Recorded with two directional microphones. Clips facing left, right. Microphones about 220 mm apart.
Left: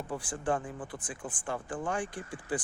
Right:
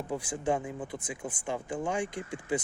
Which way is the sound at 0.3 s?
10° right (ahead or behind).